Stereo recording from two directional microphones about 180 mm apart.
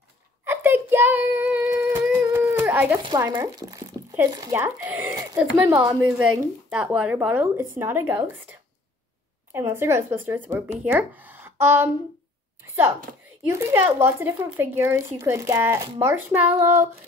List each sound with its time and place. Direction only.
0.5 s child singing: 10° right (ahead or behind)
3.3 s speech: 20° right (ahead or behind)
5.8 s speech: 5° right (ahead or behind)
13.4 s speech: 15° right (ahead or behind)